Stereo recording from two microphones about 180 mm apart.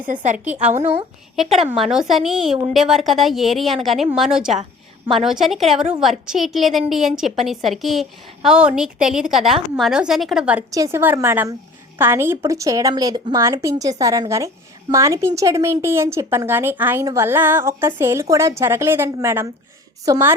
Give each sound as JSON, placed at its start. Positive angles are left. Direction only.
{"t": 0.1, "sound": "a woman's voice", "side_deg": -45}
{"t": 0.3, "sound": "a woman's voice", "side_deg": -5}